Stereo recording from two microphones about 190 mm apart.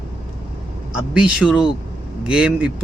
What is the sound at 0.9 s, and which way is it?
Speech, 5° right (ahead or behind).